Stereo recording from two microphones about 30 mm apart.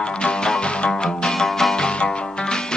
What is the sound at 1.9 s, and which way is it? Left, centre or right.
Music, left.